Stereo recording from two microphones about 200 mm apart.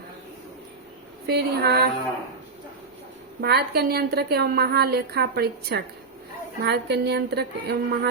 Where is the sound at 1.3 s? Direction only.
50° right (ahead or behind).